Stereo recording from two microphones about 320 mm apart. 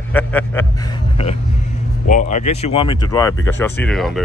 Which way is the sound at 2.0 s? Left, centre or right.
Left.